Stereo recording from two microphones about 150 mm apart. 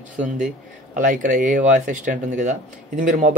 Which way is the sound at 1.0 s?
60° right (ahead or behind).